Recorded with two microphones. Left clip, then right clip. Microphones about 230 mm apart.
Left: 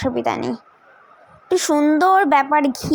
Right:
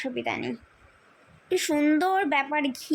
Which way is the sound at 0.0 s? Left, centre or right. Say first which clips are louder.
Left 9 dB; left.